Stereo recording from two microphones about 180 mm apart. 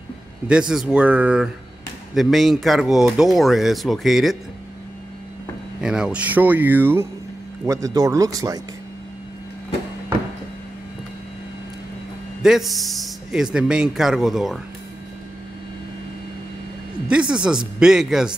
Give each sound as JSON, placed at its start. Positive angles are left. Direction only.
{"t": 0.5, "sound": "speech", "side_deg": -5}
{"t": 5.8, "sound": "speech", "side_deg": -5}
{"t": 12.4, "sound": "speech", "side_deg": 0}
{"t": 17.1, "sound": "speech", "side_deg": -5}